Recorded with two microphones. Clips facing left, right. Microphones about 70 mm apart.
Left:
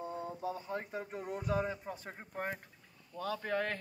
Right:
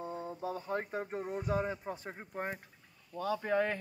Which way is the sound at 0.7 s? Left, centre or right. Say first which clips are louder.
Right 4 dB; right.